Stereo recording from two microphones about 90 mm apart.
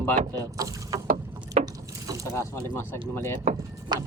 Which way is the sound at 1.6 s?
40° right (ahead or behind).